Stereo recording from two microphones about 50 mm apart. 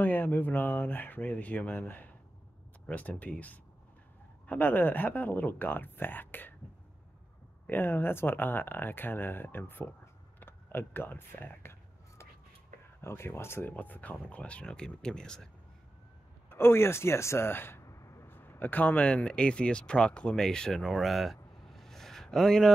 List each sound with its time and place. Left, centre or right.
0.0 s speech: left
7.7 s speech: left
13.0 s speech: left
13.7 s speech: left; by 15.5 s centre
16.4 s speech: left
17.5 s speech: left
17.8 s vehicle: left
18.2 s a sound: left
19.0 s speech: left
20.8 s a sound: centre